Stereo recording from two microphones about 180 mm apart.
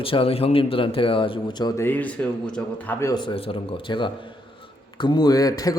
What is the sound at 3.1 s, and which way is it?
A man's voice, 25° left (ahead or behind).